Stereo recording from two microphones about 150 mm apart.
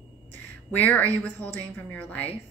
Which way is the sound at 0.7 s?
10° left (ahead or behind).